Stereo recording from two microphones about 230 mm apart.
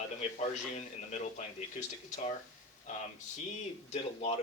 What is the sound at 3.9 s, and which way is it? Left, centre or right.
Speech, left.